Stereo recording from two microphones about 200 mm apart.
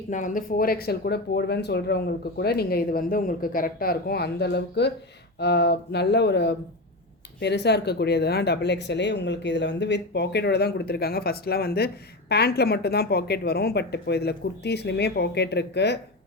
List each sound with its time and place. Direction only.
0.1 s speech: 40° left (ahead or behind); by 16.0 s 60° left (ahead or behind)